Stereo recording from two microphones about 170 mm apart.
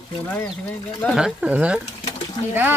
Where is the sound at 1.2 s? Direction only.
5° right (ahead or behind).